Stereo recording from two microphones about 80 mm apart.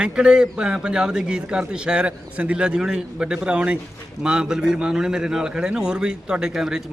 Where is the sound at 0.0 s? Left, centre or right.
Centre.